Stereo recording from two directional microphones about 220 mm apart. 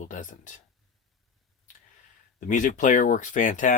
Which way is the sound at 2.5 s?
35° left (ahead or behind).